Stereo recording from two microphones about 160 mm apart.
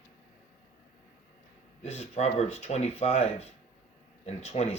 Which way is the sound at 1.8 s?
45° left (ahead or behind).